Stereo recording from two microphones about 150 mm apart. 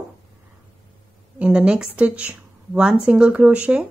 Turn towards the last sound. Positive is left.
turn(degrees=-5)  # may be behind; listen again after turning